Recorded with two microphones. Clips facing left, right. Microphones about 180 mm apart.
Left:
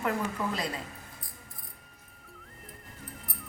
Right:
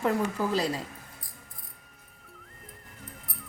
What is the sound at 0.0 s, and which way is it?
Speech, 30° right (ahead or behind).